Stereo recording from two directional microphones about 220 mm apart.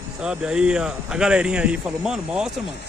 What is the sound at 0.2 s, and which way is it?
Speech, 5° right (ahead or behind).